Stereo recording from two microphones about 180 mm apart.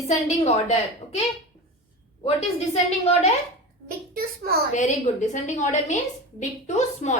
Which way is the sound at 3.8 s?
55° right (ahead or behind).